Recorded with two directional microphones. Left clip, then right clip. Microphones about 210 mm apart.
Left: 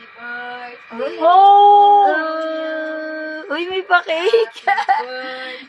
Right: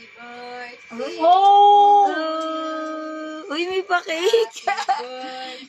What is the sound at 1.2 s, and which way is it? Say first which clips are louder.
Speech: left 4 dB; 15° right (ahead or behind).